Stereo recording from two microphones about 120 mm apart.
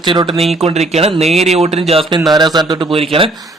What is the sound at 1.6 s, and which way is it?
Speech, 60° right (ahead or behind).